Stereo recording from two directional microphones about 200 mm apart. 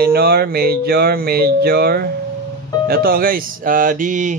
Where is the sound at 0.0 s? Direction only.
50° right (ahead or behind).